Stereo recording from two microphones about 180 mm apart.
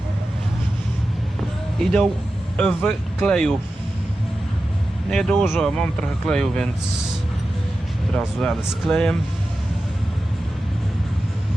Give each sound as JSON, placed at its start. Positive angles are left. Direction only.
{"t": 1.8, "sound": "speech", "side_deg": 5}
{"t": 5.1, "sound": "speech", "side_deg": 5}
{"t": 8.1, "sound": "speech", "side_deg": 5}